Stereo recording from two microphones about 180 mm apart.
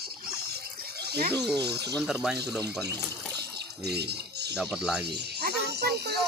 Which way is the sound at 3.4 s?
65° right (ahead or behind).